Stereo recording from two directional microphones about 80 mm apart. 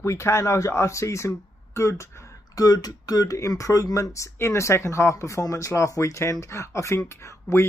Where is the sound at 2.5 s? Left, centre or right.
Left.